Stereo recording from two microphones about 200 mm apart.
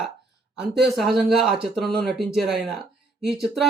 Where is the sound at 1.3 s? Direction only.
Centre (ahead or behind).